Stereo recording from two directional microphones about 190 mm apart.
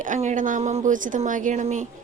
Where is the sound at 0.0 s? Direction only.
40° right (ahead or behind).